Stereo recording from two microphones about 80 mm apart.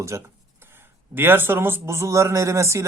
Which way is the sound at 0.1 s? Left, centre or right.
Right.